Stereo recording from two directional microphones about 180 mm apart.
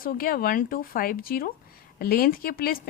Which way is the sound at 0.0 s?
55° left (ahead or behind).